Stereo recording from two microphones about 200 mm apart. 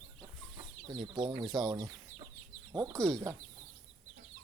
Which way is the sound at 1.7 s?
20° right (ahead or behind).